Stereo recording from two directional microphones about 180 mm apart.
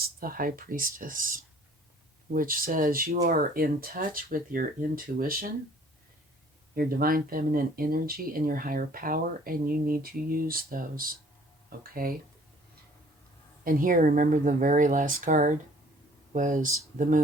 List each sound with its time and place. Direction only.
0.0 s speech: 55° right (ahead or behind)
6.7 s speech: 55° right (ahead or behind)
13.7 s speech: 50° right (ahead or behind)